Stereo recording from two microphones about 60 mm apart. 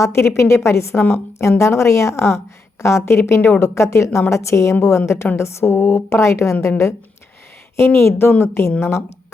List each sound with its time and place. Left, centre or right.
0.0 s a woman's voice: left
7.8 s a woman's voice: left
8.8 s a woman's voice: left